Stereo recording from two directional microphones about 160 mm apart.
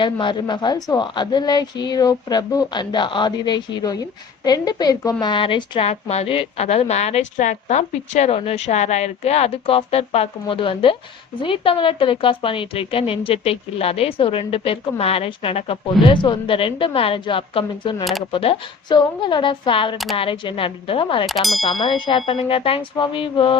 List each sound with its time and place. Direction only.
0.0 s a woman's voice: 30° left (ahead or behind)
21.2 s ding: centre (ahead or behind)
21.6 s a woman's voice: 30° left (ahead or behind)